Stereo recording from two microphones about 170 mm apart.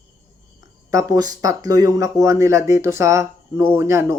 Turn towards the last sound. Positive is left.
turn(degrees=-15)  # may be behind; listen again after turning